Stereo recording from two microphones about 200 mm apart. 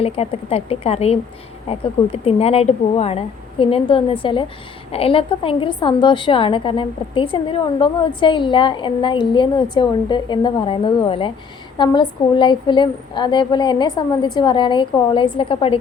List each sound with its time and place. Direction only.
0.0 s a woman's voice: 30° left (ahead or behind)